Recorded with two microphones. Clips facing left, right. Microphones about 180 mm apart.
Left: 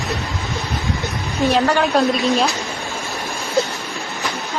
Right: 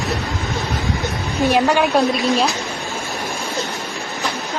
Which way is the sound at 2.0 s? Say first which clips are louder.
Even; centre (ahead or behind).